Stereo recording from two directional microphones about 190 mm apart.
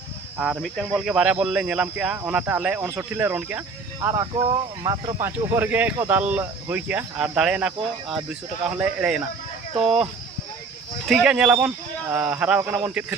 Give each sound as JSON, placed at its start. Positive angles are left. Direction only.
{"t": 0.3, "sound": "speech", "side_deg": -5}
{"t": 5.2, "sound": "speech", "side_deg": -10}
{"t": 11.0, "sound": "speech", "side_deg": -5}